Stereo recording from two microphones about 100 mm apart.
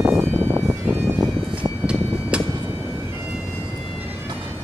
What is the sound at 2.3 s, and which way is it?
Vehicle, 10° right (ahead or behind).